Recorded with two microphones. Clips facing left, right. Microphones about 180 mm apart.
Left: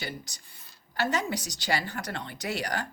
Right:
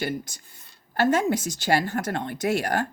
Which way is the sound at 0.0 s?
50° right (ahead or behind).